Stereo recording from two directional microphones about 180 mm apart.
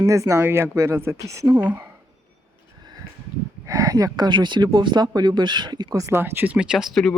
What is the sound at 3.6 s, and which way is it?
Speech, 20° right (ahead or behind).